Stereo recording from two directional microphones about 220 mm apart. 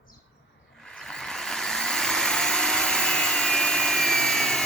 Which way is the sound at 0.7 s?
5° left (ahead or behind).